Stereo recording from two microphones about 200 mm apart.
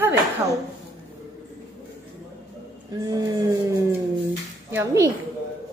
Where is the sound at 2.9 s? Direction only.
15° right (ahead or behind).